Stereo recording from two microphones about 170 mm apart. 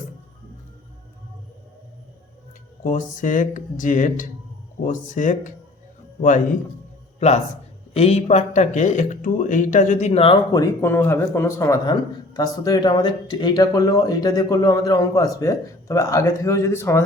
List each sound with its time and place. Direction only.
2.8 s a man's voice: 50° left (ahead or behind); by 10.3 s 35° left (ahead or behind)
10.5 s a man's voice: 20° left (ahead or behind)